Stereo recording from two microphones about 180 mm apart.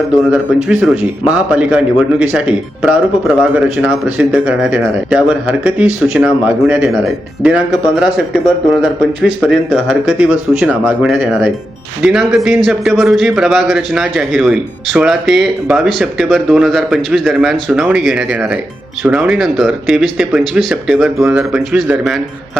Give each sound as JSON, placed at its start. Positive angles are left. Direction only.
{"t": 0.3, "sound": "a man's voice", "side_deg": -5}